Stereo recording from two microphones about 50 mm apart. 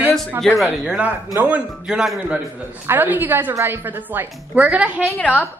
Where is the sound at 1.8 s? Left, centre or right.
Centre.